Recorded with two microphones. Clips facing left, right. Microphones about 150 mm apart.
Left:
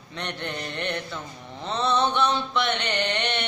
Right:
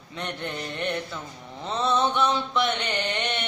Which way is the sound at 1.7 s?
5° right (ahead or behind).